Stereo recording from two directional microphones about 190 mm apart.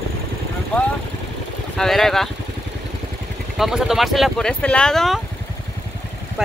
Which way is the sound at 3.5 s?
Centre (ahead or behind).